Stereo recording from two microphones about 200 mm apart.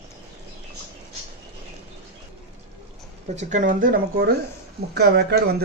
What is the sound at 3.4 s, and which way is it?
Speech, 40° right (ahead or behind).